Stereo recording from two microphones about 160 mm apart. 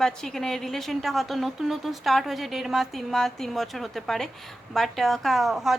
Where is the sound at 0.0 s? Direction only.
5° left (ahead or behind).